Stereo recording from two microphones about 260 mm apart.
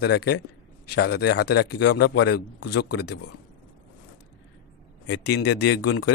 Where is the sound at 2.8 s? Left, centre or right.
Left.